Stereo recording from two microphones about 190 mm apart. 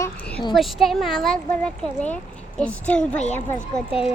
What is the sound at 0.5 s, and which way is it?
A child's voice, centre (ahead or behind).